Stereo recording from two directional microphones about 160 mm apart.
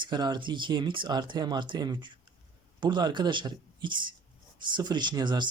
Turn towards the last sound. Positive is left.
turn(degrees=-25)  # may be behind; listen again after turning